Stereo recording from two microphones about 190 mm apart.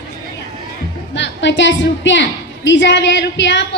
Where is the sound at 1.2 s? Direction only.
70° left (ahead or behind).